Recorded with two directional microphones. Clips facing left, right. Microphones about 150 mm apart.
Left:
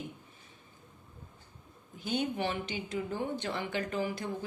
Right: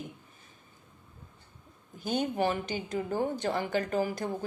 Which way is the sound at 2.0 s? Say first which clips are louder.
Right 3 dB; 45° right (ahead or behind).